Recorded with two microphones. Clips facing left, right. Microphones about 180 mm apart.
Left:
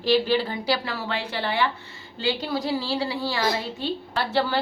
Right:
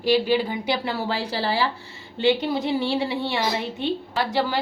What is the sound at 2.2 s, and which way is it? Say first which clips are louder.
A woman's voice: right 5 dB; 25° right (ahead or behind).